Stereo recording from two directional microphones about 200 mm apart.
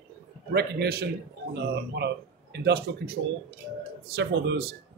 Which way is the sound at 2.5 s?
55° right (ahead or behind).